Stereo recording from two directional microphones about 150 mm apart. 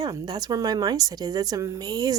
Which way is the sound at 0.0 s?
25° right (ahead or behind).